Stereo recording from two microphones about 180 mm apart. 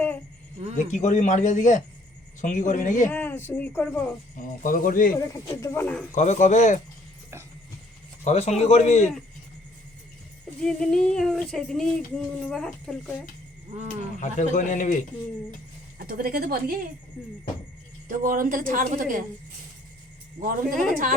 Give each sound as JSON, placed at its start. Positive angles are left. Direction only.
{"t": 0.8, "sound": "speech", "side_deg": 40}
{"t": 3.1, "sound": "speech", "side_deg": 10}
{"t": 4.4, "sound": "speech", "side_deg": 50}
{"t": 5.1, "sound": "speech", "side_deg": 20}
{"t": 6.1, "sound": "speech", "side_deg": 40}
{"t": 8.2, "sound": "speech", "side_deg": 40}
{"t": 10.6, "sound": "a sound", "side_deg": 5}
{"t": 13.8, "sound": "speech", "side_deg": 45}
{"t": 16.0, "sound": "a woman's voice", "side_deg": -55}
{"t": 18.1, "sound": "a woman's voice", "side_deg": -50}
{"t": 20.4, "sound": "a woman's voice", "side_deg": -50}